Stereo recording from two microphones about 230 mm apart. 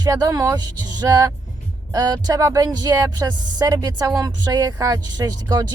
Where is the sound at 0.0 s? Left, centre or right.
Centre.